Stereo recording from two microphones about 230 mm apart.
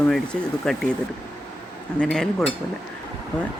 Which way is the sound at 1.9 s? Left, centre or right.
Centre.